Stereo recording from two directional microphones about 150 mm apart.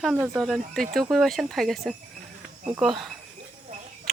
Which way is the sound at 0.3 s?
5° left (ahead or behind).